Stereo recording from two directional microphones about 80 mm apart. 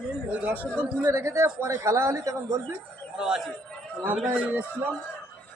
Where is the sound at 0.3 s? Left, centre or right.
Centre.